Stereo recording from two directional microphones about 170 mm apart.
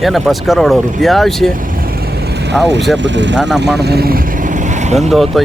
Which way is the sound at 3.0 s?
90° right.